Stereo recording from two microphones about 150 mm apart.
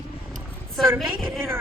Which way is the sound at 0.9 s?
Centre (ahead or behind).